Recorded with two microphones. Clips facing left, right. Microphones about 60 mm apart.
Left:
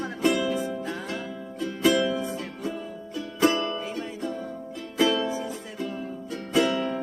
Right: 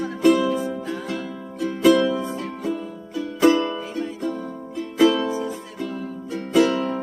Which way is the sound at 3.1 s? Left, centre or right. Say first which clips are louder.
Right 6 dB; centre.